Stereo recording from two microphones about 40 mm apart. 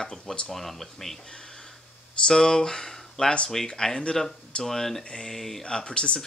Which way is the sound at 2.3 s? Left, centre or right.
Centre.